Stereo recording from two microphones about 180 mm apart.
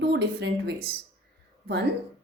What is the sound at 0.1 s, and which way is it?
Speech, 70° right (ahead or behind).